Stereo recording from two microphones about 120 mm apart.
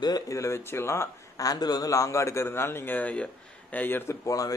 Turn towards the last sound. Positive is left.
turn(degrees=30)  # may be behind; listen again after turning